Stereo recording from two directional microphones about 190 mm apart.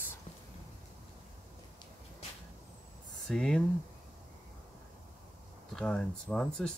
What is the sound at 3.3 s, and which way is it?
Speech, 5° left (ahead or behind).